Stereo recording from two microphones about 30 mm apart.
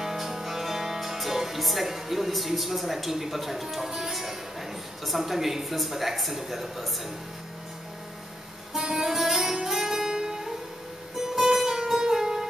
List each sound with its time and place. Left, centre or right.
0.0 s music: centre
1.6 s a woman's voice: centre
8.7 s music: centre